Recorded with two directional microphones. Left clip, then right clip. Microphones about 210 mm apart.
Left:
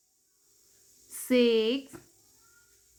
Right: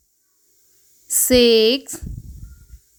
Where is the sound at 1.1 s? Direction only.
40° right (ahead or behind).